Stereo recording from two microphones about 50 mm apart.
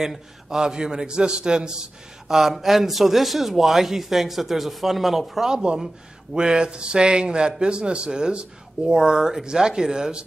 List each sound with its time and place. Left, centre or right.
0.0 s a man's voice: centre